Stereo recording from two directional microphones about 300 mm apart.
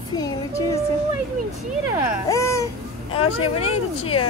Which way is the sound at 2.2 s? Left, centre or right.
Centre.